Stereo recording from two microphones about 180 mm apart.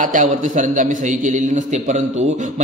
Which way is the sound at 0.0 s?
45° right (ahead or behind).